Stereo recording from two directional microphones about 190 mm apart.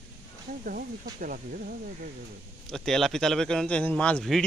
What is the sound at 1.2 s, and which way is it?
Speech, 50° right (ahead or behind).